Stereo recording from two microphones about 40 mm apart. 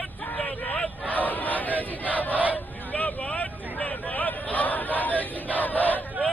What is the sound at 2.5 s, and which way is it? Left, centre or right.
Vehicle, left.